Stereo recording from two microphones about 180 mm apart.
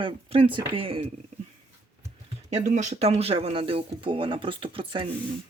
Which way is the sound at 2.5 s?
40° right (ahead or behind).